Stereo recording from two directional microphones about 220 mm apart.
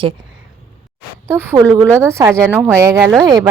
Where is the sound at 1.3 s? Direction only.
10° right (ahead or behind).